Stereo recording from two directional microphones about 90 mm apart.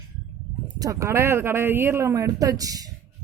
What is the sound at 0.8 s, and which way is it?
Speech, 40° right (ahead or behind).